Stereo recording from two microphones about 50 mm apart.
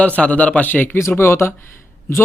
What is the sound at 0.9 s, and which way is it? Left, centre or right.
Speech, left.